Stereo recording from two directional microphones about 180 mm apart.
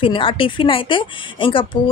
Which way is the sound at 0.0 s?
30° left (ahead or behind).